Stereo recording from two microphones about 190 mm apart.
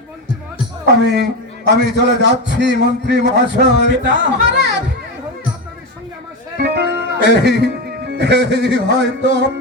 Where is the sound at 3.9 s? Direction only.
65° right (ahead or behind).